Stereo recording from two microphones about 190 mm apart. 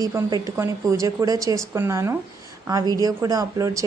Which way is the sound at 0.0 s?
20° right (ahead or behind).